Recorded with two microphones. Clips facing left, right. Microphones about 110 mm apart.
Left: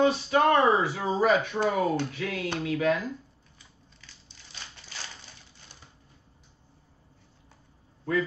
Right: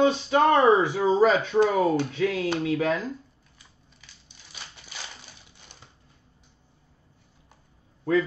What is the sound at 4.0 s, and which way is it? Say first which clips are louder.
Crushing: even; 15° right (ahead or behind).